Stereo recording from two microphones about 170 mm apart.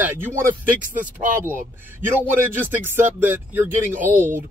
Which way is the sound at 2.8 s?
10° right (ahead or behind).